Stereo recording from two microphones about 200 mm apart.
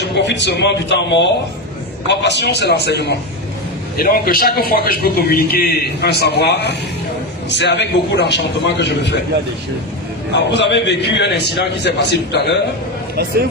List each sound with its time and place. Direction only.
0.0 s a man's voice: 60° left (ahead or behind)
10.3 s a man's voice: 60° left (ahead or behind)